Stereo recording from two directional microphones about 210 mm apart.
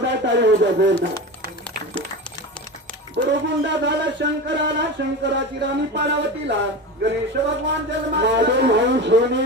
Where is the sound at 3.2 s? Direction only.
55° right (ahead or behind).